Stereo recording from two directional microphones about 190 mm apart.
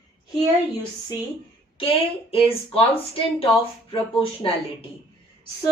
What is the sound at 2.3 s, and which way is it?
Speech, 30° left (ahead or behind).